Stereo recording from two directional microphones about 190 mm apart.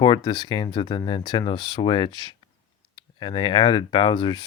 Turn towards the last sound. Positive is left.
turn(degrees=25)  # may be behind; listen again after turning